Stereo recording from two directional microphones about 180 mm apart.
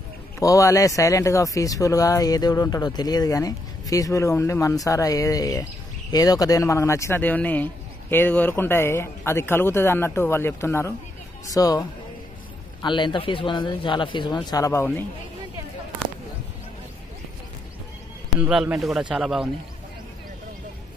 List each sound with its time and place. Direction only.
0.4 s speech: 20° left (ahead or behind)
12.8 s speech: 25° left (ahead or behind)
18.4 s speech: 5° right (ahead or behind)